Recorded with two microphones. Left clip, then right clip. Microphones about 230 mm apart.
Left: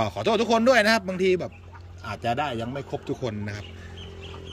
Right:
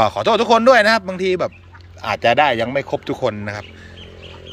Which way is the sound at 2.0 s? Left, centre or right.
Right.